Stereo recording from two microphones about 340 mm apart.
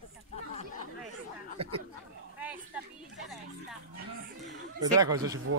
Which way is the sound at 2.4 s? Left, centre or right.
Centre.